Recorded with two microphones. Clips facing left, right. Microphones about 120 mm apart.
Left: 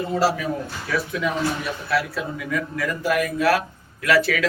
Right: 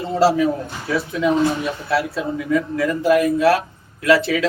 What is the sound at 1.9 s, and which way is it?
A man's voice, 30° right (ahead or behind).